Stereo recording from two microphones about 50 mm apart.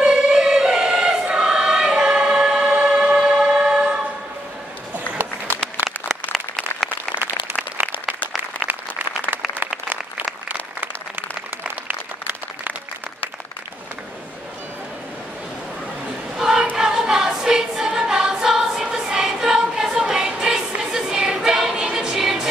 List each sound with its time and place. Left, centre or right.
0.0 s choir: centre
4.9 s applause: right
6.3 s applause: centre
9.8 s applause: right
16.3 s choir: centre